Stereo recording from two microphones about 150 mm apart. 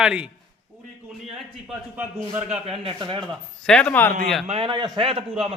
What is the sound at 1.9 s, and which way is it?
Speech, 10° right (ahead or behind).